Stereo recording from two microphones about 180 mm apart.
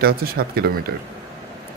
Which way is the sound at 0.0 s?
60° right (ahead or behind).